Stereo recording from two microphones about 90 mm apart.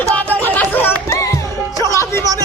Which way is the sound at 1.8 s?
35° left (ahead or behind).